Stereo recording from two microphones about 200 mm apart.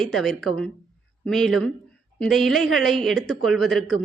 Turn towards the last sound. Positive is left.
turn(degrees=0)  # may be behind; listen again after turning